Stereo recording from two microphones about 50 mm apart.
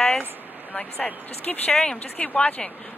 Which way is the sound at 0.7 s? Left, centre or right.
Centre.